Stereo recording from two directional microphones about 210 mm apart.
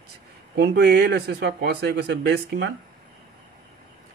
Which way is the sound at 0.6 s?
50° right (ahead or behind).